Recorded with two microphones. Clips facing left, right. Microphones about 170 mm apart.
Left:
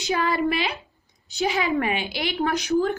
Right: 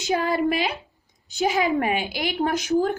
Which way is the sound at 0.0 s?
45° right (ahead or behind).